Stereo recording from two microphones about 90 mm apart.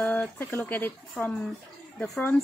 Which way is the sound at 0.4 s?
20° left (ahead or behind).